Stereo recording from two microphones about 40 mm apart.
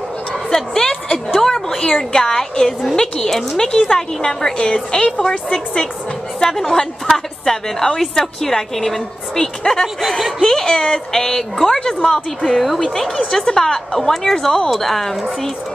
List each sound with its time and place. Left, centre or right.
0.5 s a sound: centre
3.0 s a woman's voice: centre
10.0 s a woman's voice: centre
10.4 s a woman's voice: centre